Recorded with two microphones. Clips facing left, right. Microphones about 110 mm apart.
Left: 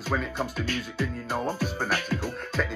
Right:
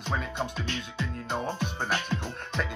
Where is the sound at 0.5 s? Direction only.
25° right (ahead or behind).